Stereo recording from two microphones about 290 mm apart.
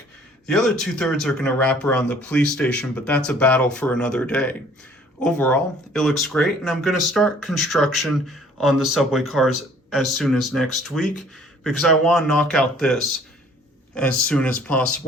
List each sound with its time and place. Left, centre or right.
0.4 s speech: centre